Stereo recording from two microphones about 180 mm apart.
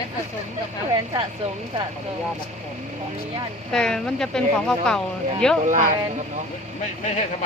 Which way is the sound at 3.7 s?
5° left (ahead or behind).